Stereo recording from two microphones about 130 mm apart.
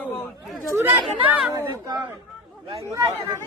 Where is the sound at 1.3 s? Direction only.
10° right (ahead or behind).